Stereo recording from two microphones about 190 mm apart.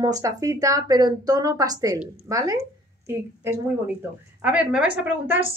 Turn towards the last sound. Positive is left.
turn(degrees=-10)  # may be behind; listen again after turning